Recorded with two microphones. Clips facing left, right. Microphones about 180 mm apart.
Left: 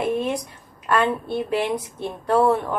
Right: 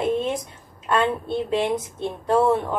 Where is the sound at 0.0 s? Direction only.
20° right (ahead or behind).